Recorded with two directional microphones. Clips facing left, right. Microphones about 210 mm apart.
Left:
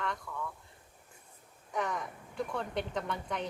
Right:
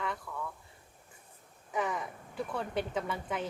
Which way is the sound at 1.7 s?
5° right (ahead or behind).